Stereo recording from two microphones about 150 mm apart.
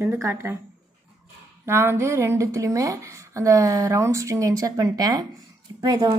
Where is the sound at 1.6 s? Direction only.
15° right (ahead or behind).